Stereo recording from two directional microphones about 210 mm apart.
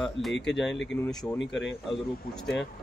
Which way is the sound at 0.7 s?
60° left (ahead or behind).